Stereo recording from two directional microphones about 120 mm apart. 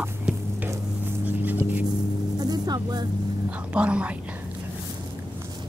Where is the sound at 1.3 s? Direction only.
15° right (ahead or behind).